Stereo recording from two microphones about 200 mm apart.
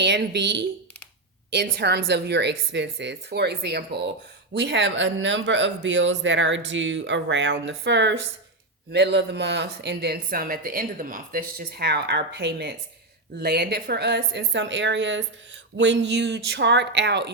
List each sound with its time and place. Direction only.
0.0 s speech: 60° right (ahead or behind)